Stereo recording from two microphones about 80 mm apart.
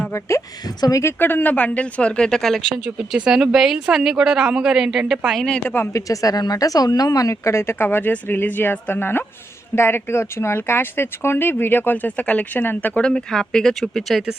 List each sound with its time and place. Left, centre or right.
0.1 s speech: left
1.2 s speech: left; by 2.8 s centre
2.8 s a woman's voice: centre
5.6 s speech: left
5.9 s speech: left; by 14.3 s centre